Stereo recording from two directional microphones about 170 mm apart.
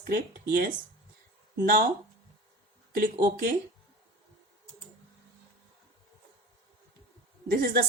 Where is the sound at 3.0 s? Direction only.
60° right (ahead or behind).